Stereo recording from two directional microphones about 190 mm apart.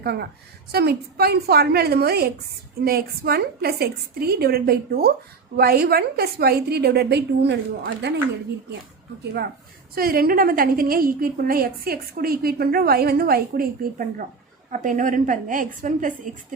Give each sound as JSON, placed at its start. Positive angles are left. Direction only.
{"t": 0.0, "sound": "a woman's voice", "side_deg": -60}
{"t": 9.9, "sound": "a woman's voice", "side_deg": -50}
{"t": 14.7, "sound": "a woman's voice", "side_deg": -45}